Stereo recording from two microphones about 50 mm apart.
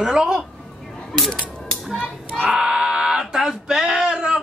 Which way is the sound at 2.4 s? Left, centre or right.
Centre.